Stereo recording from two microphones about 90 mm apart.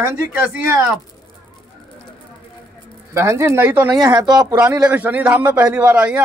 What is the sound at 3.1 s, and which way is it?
Speech, 30° right (ahead or behind).